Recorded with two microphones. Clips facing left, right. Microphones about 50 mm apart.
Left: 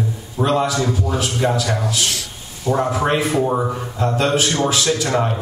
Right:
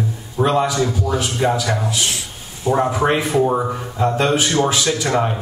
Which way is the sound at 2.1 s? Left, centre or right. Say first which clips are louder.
Even; right.